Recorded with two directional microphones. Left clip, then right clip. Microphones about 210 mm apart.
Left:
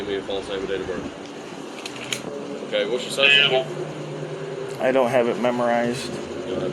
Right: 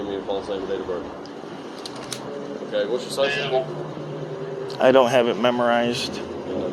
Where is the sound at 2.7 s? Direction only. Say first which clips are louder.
Left 1 dB; 15° right (ahead or behind).